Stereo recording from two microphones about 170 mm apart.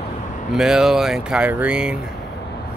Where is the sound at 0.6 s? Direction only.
5° right (ahead or behind).